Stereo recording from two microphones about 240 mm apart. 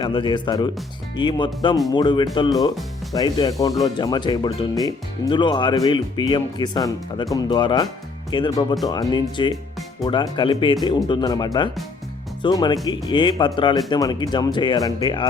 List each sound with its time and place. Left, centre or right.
0.0 s speech: centre